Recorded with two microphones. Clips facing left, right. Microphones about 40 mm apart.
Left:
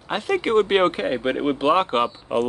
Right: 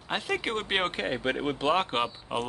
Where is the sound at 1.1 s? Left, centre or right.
Centre.